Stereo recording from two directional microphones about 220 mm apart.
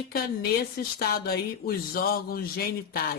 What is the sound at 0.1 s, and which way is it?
Speech, 45° left (ahead or behind).